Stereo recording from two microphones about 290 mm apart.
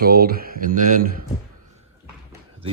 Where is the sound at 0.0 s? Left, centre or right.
Right.